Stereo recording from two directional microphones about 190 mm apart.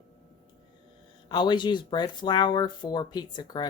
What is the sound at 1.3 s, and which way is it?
Speech, 25° left (ahead or behind).